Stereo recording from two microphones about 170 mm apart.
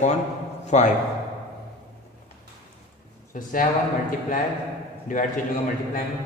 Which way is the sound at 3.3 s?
50° left (ahead or behind).